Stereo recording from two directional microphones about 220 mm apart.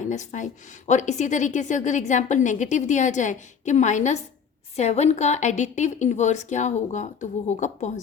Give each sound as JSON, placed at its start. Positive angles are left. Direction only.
{"t": 0.0, "sound": "a woman's voice", "side_deg": 35}